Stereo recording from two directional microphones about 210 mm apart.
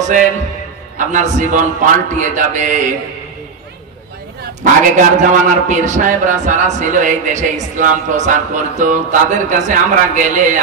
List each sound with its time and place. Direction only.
0.0 s a man's voice: 40° right (ahead or behind)
4.9 s a man's voice: 35° right (ahead or behind)